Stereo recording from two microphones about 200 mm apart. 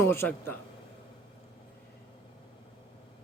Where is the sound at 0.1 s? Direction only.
10° left (ahead or behind).